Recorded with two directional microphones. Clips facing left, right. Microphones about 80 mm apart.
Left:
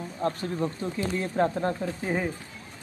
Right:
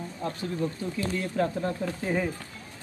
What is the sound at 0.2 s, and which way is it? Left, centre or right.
Speech, left.